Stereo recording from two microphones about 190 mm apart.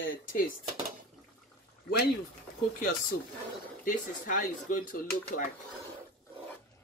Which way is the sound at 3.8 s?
40° left (ahead or behind).